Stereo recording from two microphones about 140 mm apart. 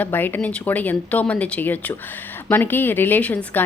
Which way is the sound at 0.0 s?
15° left (ahead or behind).